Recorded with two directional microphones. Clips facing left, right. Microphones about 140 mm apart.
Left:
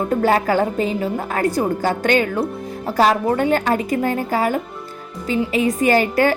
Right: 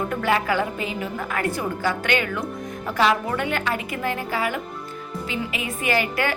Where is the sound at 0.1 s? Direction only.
40° left (ahead or behind).